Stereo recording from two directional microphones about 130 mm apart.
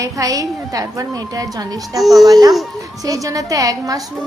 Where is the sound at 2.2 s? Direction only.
30° right (ahead or behind).